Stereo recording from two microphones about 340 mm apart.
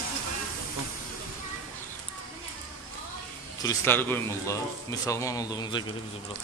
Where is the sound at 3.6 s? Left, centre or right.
Centre.